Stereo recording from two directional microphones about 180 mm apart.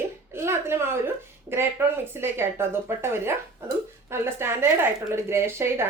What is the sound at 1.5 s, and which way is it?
A woman's voice, 15° right (ahead or behind).